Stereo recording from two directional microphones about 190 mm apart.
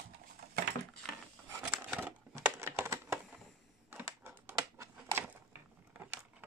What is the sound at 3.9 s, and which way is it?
Typing, 10° right (ahead or behind).